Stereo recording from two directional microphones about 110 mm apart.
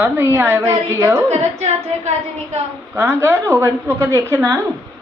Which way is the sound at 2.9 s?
20° right (ahead or behind).